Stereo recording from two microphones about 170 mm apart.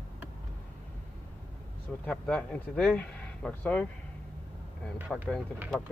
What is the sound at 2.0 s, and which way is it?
Speech, 5° left (ahead or behind).